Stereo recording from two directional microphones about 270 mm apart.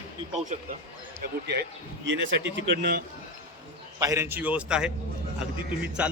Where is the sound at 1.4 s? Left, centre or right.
Right.